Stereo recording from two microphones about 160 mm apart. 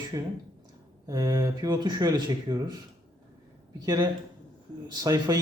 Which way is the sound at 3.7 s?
25° right (ahead or behind).